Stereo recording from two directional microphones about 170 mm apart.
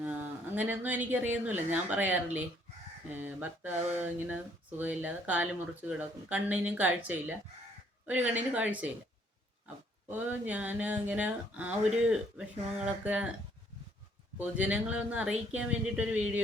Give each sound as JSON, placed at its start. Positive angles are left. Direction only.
{"t": 0.0, "sound": "speech", "side_deg": -10}
{"t": 4.8, "sound": "speech", "side_deg": -10}
{"t": 10.1, "sound": "speech", "side_deg": -10}
{"t": 14.3, "sound": "speech", "side_deg": -10}